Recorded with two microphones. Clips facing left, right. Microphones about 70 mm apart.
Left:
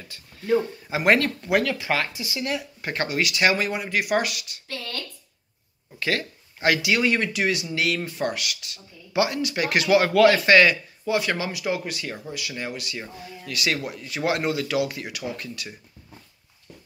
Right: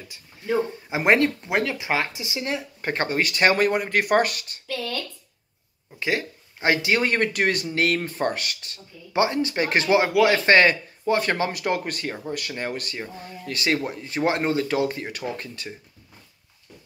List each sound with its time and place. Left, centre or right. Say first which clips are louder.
0.1 s speech: left 3 dB; right
5.9 s speech: right 1 dB; right
10.0 s speech: left 2 dB; centre
10.4 s speech: even; right